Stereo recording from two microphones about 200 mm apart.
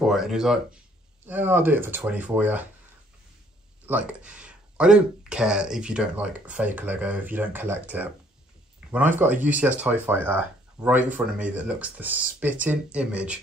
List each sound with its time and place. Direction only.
0.0 s speech: centre (ahead or behind)
3.8 s speech: 5° right (ahead or behind)